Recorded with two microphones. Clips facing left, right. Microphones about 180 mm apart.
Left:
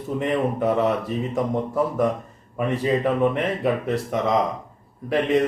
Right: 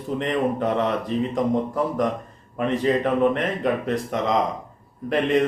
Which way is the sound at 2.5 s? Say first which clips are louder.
Right 1 dB; 10° left (ahead or behind).